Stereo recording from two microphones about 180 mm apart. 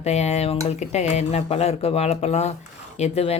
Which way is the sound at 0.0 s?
35° left (ahead or behind).